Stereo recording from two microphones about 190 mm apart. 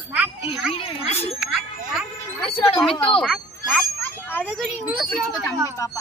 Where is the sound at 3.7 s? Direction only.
5° left (ahead or behind).